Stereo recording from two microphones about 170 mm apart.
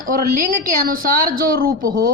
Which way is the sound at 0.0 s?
55° right (ahead or behind).